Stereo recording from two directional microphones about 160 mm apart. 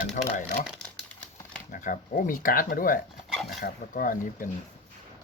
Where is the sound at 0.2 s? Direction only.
55° left (ahead or behind).